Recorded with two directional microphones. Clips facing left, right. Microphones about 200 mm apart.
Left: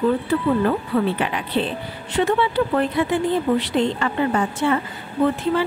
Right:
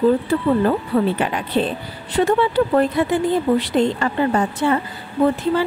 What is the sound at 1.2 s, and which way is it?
Speech, 45° right (ahead or behind).